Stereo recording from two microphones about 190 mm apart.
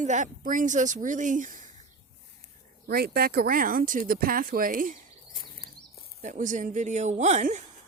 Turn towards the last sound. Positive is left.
turn(degrees=-40)  # may be behind; listen again after turning